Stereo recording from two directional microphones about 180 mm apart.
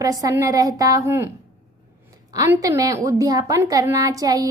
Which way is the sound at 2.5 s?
20° right (ahead or behind).